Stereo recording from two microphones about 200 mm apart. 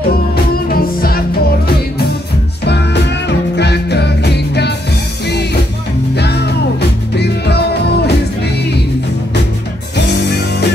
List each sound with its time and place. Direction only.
0.7 s music: 50° left (ahead or behind)
2.6 s music: 55° left (ahead or behind)
6.1 s music: 55° left (ahead or behind)
9.9 s music: 55° left (ahead or behind)